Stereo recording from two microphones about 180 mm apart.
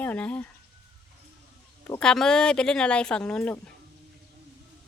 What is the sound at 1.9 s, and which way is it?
Speech, 5° left (ahead or behind).